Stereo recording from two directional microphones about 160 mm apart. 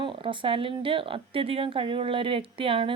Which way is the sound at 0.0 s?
30° right (ahead or behind).